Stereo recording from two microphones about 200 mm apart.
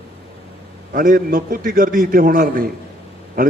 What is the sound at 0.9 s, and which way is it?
A man's voice, 45° right (ahead or behind).